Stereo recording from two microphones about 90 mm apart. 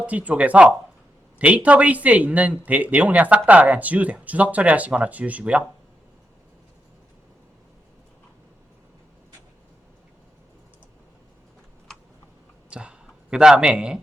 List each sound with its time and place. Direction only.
0.0 s speech: 15° right (ahead or behind)
11.9 s typing: 5° left (ahead or behind)
12.7 s speech: 10° right (ahead or behind)